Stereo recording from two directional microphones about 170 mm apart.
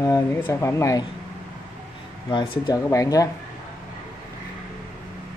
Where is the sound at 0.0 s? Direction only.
20° left (ahead or behind).